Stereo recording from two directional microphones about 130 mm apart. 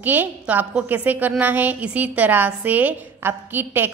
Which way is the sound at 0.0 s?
15° right (ahead or behind).